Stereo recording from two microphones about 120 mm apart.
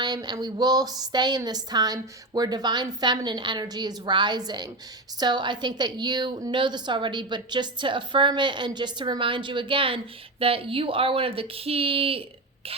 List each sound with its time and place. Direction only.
0.0 s a woman's voice: 35° right (ahead or behind)